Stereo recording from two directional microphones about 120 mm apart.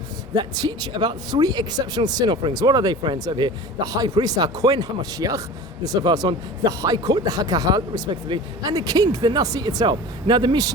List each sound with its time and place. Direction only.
0.3 s speech: 35° right (ahead or behind)